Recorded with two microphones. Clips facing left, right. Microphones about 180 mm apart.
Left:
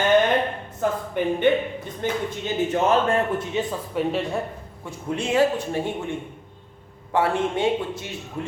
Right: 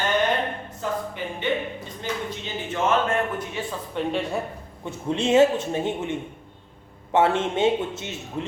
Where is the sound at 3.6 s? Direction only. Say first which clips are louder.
Left 6 dB; 20° left (ahead or behind).